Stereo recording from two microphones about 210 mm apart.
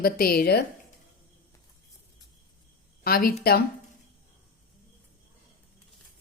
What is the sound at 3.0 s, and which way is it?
Speech, 45° left (ahead or behind).